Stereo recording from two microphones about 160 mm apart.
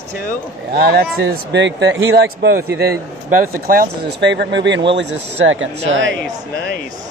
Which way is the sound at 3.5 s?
70° right (ahead or behind).